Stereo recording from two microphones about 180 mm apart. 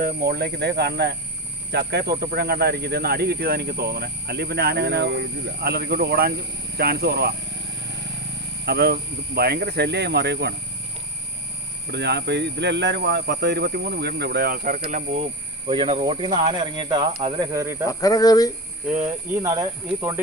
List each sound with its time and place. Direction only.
0.0 s speech: 60° right (ahead or behind)
8.6 s speech: 65° right (ahead or behind)
11.9 s speech: 65° right (ahead or behind); by 17.5 s 25° right (ahead or behind)
17.5 s speech: 15° right (ahead or behind)
17.8 s speech: 20° left (ahead or behind)
19.4 s speech: 20° right (ahead or behind)